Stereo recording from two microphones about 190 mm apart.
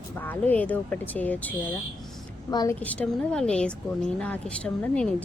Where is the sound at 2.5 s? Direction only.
20° left (ahead or behind).